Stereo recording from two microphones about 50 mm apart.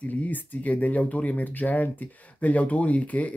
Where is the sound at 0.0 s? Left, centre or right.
Left.